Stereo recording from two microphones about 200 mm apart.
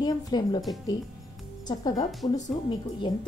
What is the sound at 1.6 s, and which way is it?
Speech, 20° left (ahead or behind).